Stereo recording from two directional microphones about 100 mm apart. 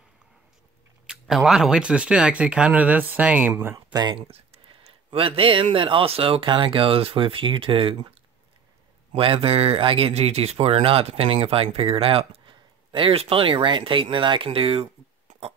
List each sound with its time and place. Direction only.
1.0 s speech: 5° right (ahead or behind); by 3.7 s 20° right (ahead or behind)
3.7 s speech: 40° right (ahead or behind)
4.1 s speech: 70° right (ahead or behind)
11.4 s speech: 70° right (ahead or behind)